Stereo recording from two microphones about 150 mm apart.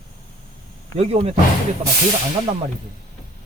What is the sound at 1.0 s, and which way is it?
Speech, 45° right (ahead or behind).